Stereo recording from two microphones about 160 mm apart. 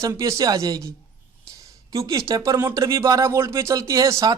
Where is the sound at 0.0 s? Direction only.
20° right (ahead or behind).